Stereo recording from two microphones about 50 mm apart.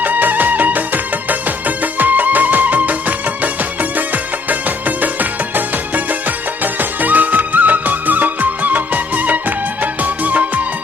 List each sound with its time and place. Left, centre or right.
0.0 s music: right